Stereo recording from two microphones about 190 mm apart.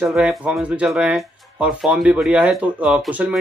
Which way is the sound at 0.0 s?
Centre (ahead or behind).